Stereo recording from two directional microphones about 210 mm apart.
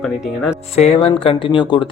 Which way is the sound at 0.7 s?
30° left (ahead or behind).